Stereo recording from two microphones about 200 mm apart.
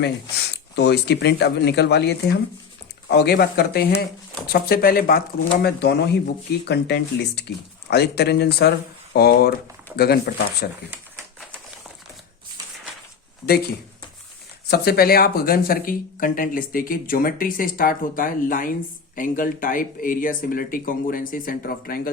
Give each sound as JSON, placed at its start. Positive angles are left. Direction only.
{"t": 0.0, "sound": "speech", "side_deg": 55}
{"t": 10.9, "sound": "typewriter", "side_deg": -5}
{"t": 14.7, "sound": "speech", "side_deg": 50}